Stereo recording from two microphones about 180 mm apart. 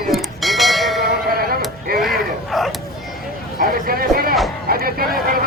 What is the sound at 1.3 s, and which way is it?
Bleat, 55° right (ahead or behind).